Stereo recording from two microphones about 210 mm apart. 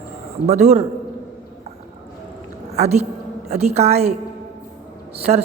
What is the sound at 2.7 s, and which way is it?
A woman's voice, 30° right (ahead or behind).